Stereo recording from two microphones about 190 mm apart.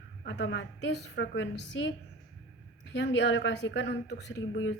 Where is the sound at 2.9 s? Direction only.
70° left (ahead or behind).